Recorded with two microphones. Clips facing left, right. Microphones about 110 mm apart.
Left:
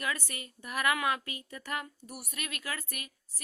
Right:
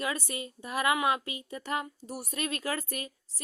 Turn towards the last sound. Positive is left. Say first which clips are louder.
# right 7 dB
turn(degrees=-30)  # may be behind; listen again after turning